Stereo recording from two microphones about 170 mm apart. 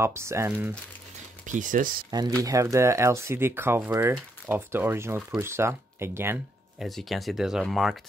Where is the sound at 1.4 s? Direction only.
50° right (ahead or behind).